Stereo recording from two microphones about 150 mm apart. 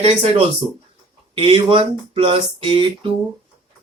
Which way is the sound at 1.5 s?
40° right (ahead or behind).